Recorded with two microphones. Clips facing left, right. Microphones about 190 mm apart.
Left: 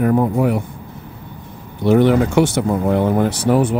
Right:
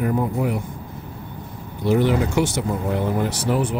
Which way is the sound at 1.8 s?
60° left (ahead or behind).